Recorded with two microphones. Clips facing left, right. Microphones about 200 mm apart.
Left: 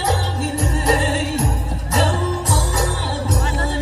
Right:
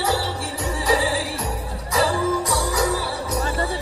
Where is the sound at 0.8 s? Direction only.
25° left (ahead or behind).